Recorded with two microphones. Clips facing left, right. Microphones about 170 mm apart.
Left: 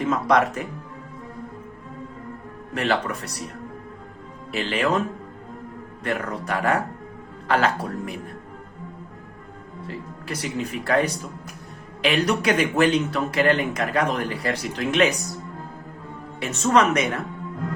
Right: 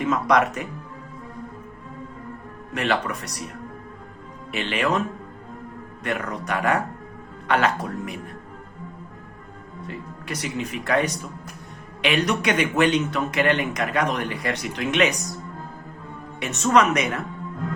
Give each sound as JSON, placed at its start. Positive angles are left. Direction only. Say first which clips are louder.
{"t": 0.0, "sound": "a man's voice", "louder": "even", "side_deg": 30}
{"t": 2.7, "sound": "a man's voice", "louder": "left 1 dB", "side_deg": 30}
{"t": 4.7, "sound": "a man's voice", "louder": "left 1 dB", "side_deg": 30}
{"t": 9.8, "sound": "a man's voice", "louder": "even", "side_deg": 30}
{"t": 16.4, "sound": "a man's voice", "louder": "even", "side_deg": 30}